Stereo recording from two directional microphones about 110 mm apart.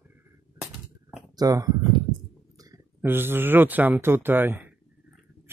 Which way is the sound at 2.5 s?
30° right (ahead or behind).